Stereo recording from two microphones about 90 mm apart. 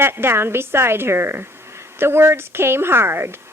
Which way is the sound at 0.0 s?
25° right (ahead or behind).